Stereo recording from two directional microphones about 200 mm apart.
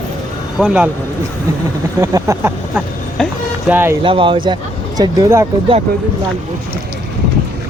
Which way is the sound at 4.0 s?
25° right (ahead or behind).